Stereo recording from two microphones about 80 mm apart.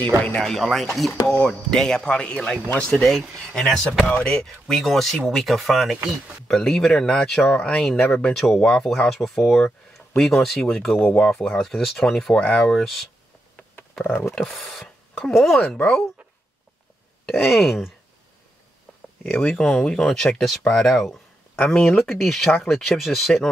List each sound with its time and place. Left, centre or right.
0.4 s speech: centre
14.3 s speech: centre
17.3 s speech: centre
19.2 s speech: centre